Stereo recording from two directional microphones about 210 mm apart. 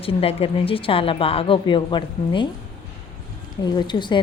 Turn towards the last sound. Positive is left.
turn(degrees=20)  # may be behind; listen again after turning